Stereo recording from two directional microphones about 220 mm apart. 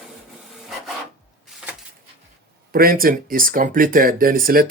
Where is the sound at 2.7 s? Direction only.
40° right (ahead or behind).